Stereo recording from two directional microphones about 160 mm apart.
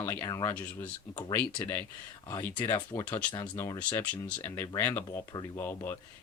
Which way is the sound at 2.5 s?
30° left (ahead or behind).